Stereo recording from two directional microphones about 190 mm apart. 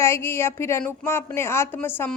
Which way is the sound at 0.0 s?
15° left (ahead or behind).